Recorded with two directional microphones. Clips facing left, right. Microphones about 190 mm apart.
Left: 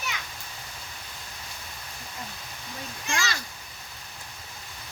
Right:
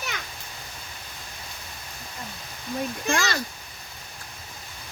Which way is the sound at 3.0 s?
55° right (ahead or behind).